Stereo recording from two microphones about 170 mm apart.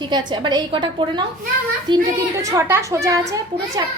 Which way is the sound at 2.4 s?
15° right (ahead or behind).